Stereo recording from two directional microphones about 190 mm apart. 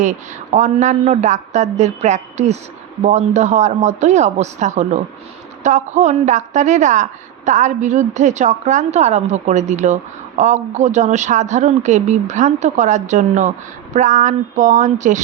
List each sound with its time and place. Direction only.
0.0 s a woman's voice: 40° right (ahead or behind)